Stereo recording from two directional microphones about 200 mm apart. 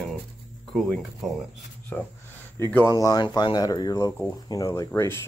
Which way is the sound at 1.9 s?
5° left (ahead or behind).